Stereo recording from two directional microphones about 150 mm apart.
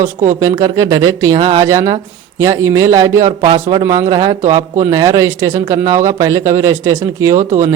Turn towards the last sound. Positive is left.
turn(degrees=-20)  # may be behind; listen again after turning